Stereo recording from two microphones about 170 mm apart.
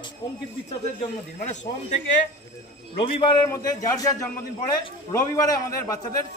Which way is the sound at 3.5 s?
20° left (ahead or behind).